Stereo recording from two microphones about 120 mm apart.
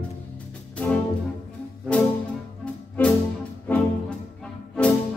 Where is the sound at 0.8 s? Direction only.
15° left (ahead or behind).